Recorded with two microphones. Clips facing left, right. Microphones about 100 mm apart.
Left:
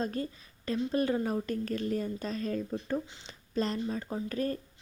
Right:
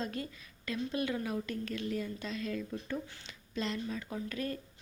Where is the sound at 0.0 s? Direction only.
35° left (ahead or behind).